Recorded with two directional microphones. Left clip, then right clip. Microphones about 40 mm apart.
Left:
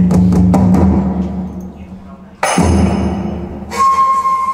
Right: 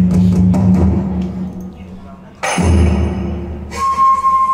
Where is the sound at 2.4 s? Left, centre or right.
Left.